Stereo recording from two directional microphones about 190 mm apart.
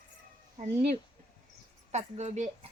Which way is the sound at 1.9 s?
40° right (ahead or behind).